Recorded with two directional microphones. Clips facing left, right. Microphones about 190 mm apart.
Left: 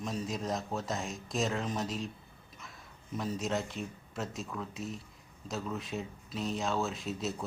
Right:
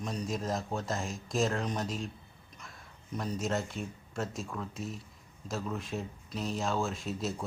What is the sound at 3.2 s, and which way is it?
Speech, centre (ahead or behind).